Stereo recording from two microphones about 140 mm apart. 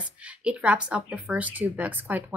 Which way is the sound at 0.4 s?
5° right (ahead or behind).